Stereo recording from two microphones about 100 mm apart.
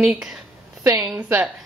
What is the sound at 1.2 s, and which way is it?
Speech, 20° right (ahead or behind).